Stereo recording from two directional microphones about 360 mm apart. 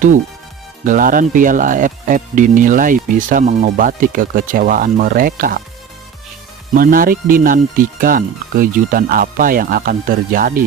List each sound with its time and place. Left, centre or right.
0.9 s speech: right
6.7 s speech: right